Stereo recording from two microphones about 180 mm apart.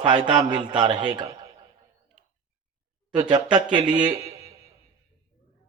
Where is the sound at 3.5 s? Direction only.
25° right (ahead or behind).